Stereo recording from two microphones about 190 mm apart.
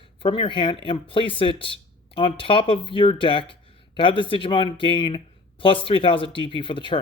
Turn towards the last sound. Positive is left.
turn(degrees=25)  # may be behind; listen again after turning